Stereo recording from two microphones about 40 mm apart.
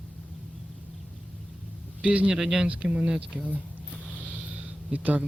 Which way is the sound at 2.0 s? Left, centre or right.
Right.